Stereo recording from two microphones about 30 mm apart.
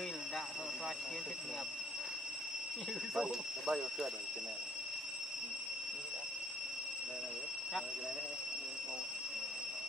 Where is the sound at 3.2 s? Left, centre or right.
Centre.